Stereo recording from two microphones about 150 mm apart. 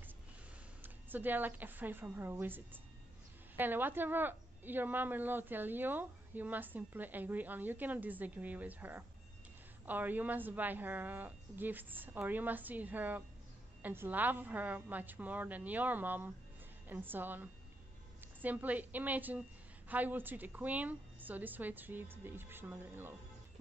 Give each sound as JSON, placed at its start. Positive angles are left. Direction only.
{"t": 0.8, "sound": "a woman's voice", "side_deg": -10}